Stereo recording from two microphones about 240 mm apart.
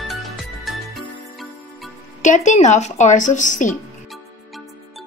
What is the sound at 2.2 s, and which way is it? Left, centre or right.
Speech, left.